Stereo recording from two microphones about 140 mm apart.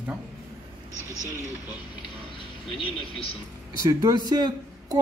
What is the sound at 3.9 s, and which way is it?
Speech, 25° right (ahead or behind).